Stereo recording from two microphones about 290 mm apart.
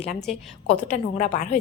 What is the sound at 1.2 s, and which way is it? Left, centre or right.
Speech, left.